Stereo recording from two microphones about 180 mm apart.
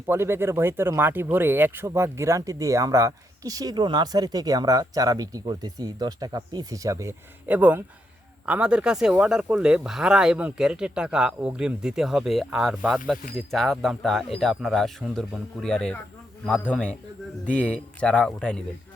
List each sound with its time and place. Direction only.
0.1 s speech: 15° right (ahead or behind); by 18.6 s 5° left (ahead or behind)